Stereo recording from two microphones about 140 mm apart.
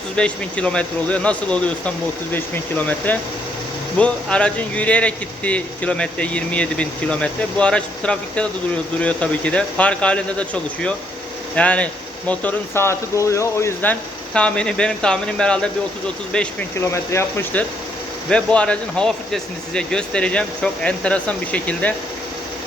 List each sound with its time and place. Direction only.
0.2 s speech: 10° left (ahead or behind)
14.3 s speech: 5° left (ahead or behind)